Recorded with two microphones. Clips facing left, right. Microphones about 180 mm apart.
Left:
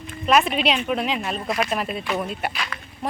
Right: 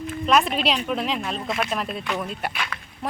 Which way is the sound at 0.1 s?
Centre (ahead or behind).